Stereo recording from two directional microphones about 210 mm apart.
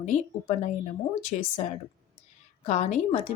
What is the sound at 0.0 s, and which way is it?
Speech, 35° left (ahead or behind).